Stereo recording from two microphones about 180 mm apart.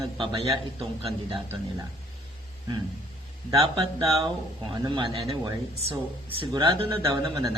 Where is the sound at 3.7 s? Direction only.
20° right (ahead or behind).